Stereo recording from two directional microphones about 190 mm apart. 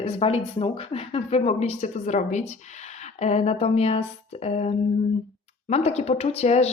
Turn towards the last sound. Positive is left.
turn(degrees=35)  # may be behind; listen again after turning